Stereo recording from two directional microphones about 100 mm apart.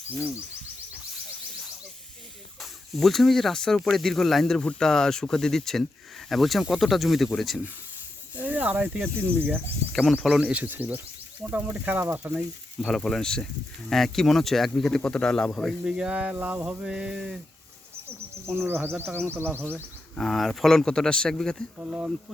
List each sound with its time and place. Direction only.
2.6 s speech: centre (ahead or behind)
8.4 s speech: 15° right (ahead or behind)
9.9 s speech: 5° left (ahead or behind)
10.4 s a sound: 15° right (ahead or behind)
12.0 s a man's voice: 20° right (ahead or behind)
12.3 s speech: 10° right (ahead or behind)
12.9 s speech: 5° left (ahead or behind)
15.8 s a sound: 5° right (ahead or behind)
18.4 s a man's voice: 25° right (ahead or behind)
20.1 s speech: centre (ahead or behind)
21.8 s a sound: 15° right (ahead or behind)